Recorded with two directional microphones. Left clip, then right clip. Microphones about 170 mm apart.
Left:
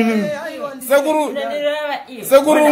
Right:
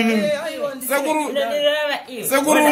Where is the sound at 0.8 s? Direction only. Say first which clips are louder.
Left 7 dB; 55° left (ahead or behind).